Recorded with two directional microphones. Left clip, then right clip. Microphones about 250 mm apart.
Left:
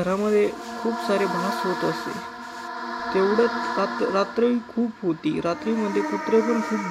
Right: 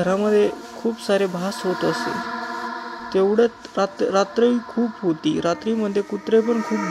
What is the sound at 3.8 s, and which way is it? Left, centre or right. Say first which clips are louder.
A man's voice: right 5 dB; centre.